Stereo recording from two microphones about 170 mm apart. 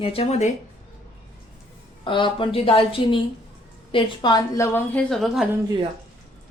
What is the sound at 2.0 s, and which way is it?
A woman's voice, 30° left (ahead or behind).